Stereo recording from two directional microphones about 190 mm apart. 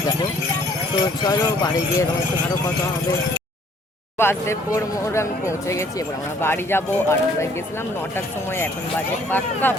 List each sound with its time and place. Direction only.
1.2 s speech: 20° left (ahead or behind)
4.2 s speech: 15° left (ahead or behind)
9.3 s speech: 10° left (ahead or behind)